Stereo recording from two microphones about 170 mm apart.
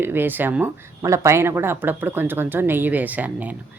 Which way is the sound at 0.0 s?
10° right (ahead or behind).